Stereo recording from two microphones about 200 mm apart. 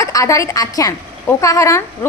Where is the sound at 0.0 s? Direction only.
15° left (ahead or behind).